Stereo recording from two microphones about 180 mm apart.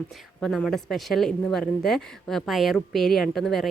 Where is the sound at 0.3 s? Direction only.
Centre (ahead or behind).